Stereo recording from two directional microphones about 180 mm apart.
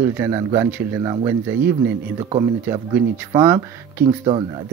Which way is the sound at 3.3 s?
15° right (ahead or behind).